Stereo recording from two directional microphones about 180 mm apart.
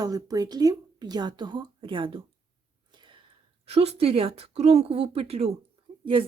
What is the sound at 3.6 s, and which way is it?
Speech, 35° right (ahead or behind).